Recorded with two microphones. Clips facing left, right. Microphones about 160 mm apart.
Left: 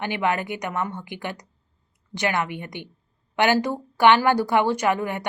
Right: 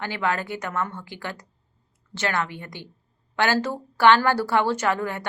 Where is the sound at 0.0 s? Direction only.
20° left (ahead or behind).